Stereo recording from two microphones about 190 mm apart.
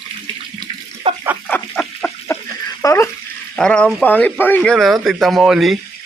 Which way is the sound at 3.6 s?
5° left (ahead or behind).